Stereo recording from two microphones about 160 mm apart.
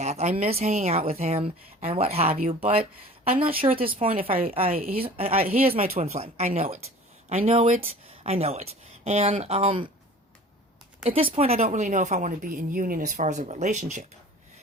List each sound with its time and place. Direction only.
0.0 s a woman's voice: 45° right (ahead or behind)
4.7 s speech: 65° right (ahead or behind)
5.0 s a woman's voice: 40° right (ahead or behind)
11.0 s a woman's voice: 35° right (ahead or behind); by 14.1 s 50° right (ahead or behind)